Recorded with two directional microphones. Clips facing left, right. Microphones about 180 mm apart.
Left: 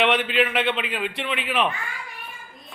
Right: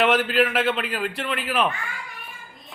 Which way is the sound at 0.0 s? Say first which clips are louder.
Right 1 dB; centre (ahead or behind).